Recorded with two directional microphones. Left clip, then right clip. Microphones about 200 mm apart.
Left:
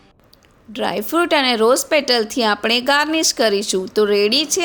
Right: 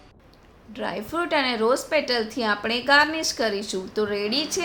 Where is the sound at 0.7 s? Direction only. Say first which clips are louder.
Left 9 dB; 45° left (ahead or behind).